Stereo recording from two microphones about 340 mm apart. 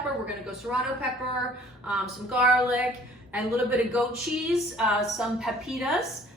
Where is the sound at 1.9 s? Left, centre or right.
Centre.